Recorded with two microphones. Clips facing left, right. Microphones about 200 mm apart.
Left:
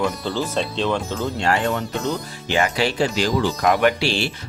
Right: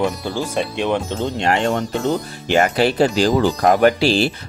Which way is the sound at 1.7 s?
50° right (ahead or behind).